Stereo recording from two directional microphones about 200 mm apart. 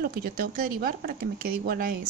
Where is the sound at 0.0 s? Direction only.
45° right (ahead or behind).